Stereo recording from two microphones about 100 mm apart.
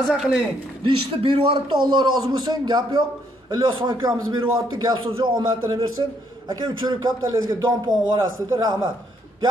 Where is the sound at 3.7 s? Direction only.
55° right (ahead or behind).